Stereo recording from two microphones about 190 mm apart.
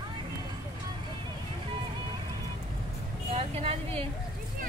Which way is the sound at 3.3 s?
30° right (ahead or behind).